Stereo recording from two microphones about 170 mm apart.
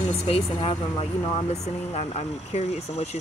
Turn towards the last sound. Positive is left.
turn(degrees=40)  # may be behind; listen again after turning